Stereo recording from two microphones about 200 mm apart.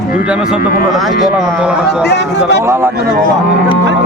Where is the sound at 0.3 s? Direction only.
5° right (ahead or behind).